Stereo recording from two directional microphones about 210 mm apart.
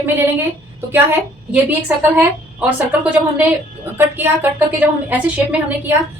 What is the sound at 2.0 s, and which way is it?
A woman's voice, 10° right (ahead or behind).